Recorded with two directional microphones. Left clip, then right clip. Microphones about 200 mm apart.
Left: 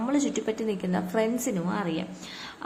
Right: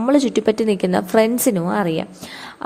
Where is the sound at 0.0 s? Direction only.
40° right (ahead or behind).